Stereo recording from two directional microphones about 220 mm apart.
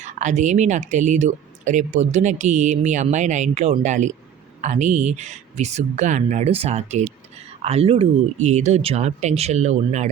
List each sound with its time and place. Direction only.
0.0 s speech: 35° right (ahead or behind)